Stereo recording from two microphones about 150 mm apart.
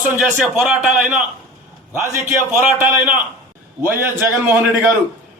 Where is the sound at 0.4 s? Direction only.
5° right (ahead or behind).